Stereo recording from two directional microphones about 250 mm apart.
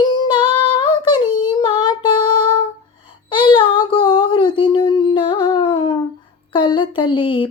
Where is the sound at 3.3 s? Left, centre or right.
Centre.